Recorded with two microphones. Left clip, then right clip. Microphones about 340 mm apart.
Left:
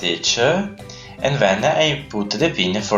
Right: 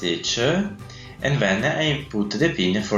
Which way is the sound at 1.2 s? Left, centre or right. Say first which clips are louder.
Left 5 dB; left.